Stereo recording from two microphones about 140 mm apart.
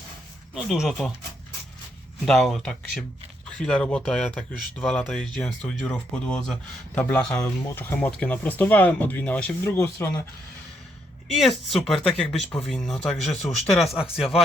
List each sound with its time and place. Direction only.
0.5 s speech: 5° right (ahead or behind)
2.2 s speech: centre (ahead or behind)
9.7 s speech: 20° left (ahead or behind)
11.3 s speech: centre (ahead or behind)